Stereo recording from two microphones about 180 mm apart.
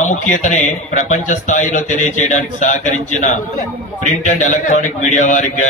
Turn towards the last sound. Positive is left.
turn(degrees=45)  # may be behind; listen again after turning